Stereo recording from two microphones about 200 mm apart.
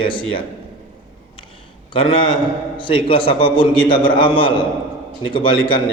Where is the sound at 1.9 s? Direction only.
25° left (ahead or behind).